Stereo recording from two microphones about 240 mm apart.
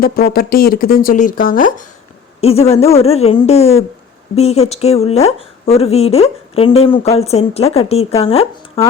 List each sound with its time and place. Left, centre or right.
0.0 s speech: left